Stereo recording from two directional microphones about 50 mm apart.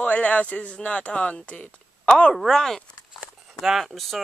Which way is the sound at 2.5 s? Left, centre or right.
Centre.